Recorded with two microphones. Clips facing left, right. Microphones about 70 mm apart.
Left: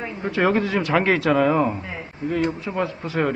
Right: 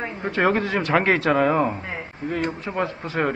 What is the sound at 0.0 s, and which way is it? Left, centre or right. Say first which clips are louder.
A man's voice: even; centre.